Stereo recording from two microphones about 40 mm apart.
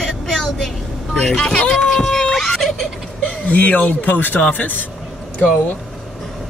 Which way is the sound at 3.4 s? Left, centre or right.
Left.